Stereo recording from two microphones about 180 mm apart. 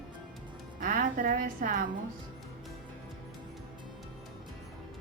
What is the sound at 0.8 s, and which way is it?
A woman's voice, 50° right (ahead or behind).